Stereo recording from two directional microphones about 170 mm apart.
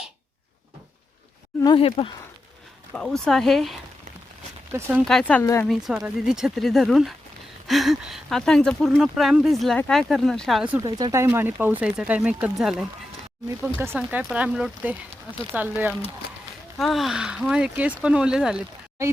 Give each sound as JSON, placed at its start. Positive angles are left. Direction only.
{"t": 1.6, "sound": "speech", "side_deg": 30}
{"t": 2.9, "sound": "speech", "side_deg": 5}
{"t": 4.7, "sound": "speech", "side_deg": -10}
{"t": 5.0, "sound": "speech", "side_deg": 5}
{"t": 5.4, "sound": "speech", "side_deg": 15}
{"t": 5.6, "sound": "speech", "side_deg": 0}
{"t": 10.8, "sound": "speech", "side_deg": -20}